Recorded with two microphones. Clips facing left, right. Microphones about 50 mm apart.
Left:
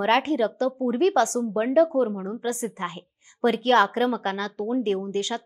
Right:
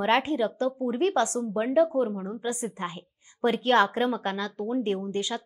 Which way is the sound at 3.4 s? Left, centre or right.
Left.